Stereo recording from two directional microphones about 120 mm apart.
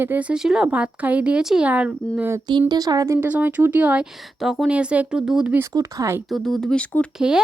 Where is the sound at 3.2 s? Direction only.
15° right (ahead or behind).